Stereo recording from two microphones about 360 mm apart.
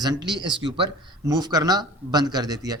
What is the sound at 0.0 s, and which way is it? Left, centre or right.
Speech, centre.